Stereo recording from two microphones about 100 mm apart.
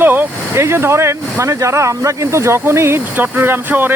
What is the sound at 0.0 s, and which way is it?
Speech, 20° right (ahead or behind).